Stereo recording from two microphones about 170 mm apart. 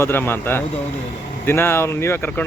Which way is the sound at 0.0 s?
15° left (ahead or behind).